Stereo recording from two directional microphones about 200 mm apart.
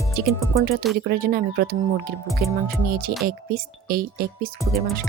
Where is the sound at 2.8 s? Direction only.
45° right (ahead or behind).